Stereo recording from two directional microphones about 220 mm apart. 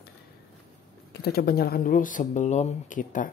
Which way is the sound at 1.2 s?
45° left (ahead or behind).